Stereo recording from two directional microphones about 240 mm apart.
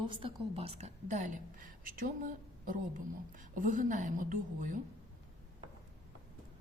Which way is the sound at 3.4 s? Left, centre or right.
Right.